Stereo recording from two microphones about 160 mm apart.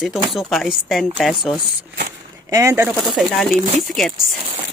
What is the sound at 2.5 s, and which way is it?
Speech, 20° right (ahead or behind).